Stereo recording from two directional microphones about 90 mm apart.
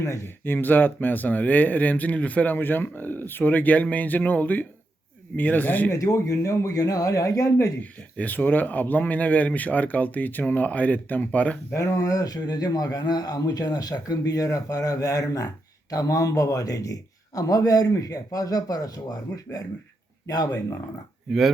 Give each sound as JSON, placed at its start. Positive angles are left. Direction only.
{"t": 0.0, "sound": "speech", "side_deg": 25}
{"t": 5.9, "sound": "a man's voice", "side_deg": 35}
{"t": 7.8, "sound": "speech", "side_deg": 15}
{"t": 11.7, "sound": "a man's voice", "side_deg": 35}
{"t": 21.3, "sound": "speech", "side_deg": -5}